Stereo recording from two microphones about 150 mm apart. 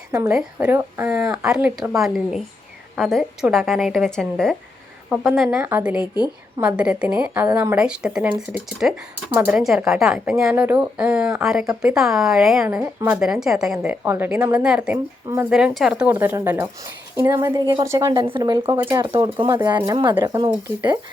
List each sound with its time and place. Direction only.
0.3 s a woman's voice: 10° right (ahead or behind)
1.5 s a woman's voice: 5° right (ahead or behind)
9.3 s a woman's voice: 15° right (ahead or behind)
9.6 s speech: 5° right (ahead or behind)
12.6 s a woman's voice: 15° right (ahead or behind)
18.1 s speech: 35° right (ahead or behind)
18.6 s a woman's voice: 15° right (ahead or behind)
19.2 s speech: 30° right (ahead or behind)